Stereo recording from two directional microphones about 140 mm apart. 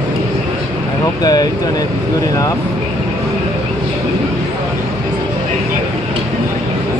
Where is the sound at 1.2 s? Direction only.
30° left (ahead or behind).